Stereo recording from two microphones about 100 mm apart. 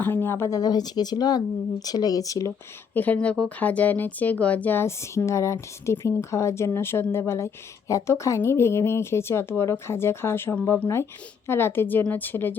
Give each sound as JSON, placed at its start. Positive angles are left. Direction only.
{"t": 0.0, "sound": "speech", "side_deg": 20}
{"t": 0.6, "sound": "speech", "side_deg": 45}
{"t": 2.9, "sound": "speech", "side_deg": 15}